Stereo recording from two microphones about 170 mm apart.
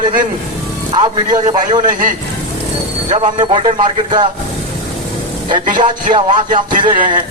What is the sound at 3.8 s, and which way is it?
Speech, 30° right (ahead or behind).